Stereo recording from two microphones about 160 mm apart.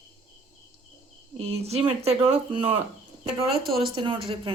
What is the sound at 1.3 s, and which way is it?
Speech, 40° right (ahead or behind).